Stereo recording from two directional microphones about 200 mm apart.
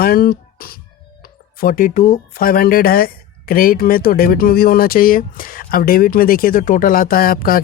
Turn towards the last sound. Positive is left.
turn(degrees=45)  # may be behind; listen again after turning